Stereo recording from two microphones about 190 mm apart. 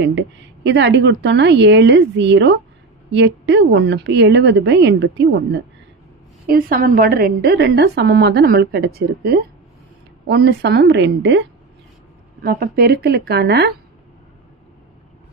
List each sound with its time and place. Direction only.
0.7 s speech: 70° right (ahead or behind)
6.4 s a woman's voice: 50° right (ahead or behind); by 11.4 s 70° right (ahead or behind)
12.4 s a woman's voice: 50° right (ahead or behind)